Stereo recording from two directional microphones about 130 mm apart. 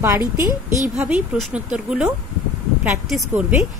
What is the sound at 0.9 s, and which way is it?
Speech, 5° right (ahead or behind).